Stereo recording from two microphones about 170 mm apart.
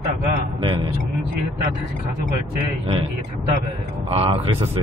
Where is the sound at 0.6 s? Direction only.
30° right (ahead or behind).